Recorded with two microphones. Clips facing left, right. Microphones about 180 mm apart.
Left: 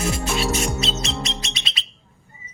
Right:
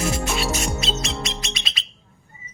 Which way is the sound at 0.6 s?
30° left (ahead or behind).